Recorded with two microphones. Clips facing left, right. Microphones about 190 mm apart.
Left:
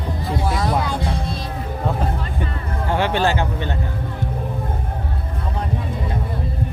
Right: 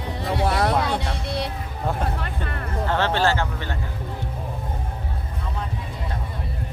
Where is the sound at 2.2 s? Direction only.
60° right (ahead or behind).